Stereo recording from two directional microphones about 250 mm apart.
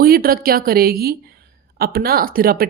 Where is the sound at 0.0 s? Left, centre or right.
Right.